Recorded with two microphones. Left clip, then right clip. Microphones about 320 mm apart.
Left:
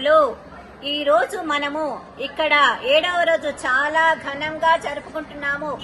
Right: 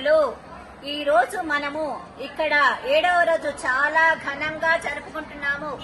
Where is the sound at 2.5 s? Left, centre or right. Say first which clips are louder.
Left 3 dB; left.